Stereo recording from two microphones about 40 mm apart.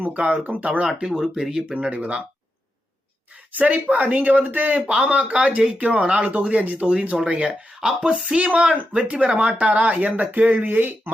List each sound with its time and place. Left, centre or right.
0.4 s speech: right
1.0 s speech: centre
1.7 s speech: right
3.5 s speech: right
4.2 s speech: right
7.4 s speech: centre
8.1 s speech: right
9.6 s speech: right
10.7 s speech: right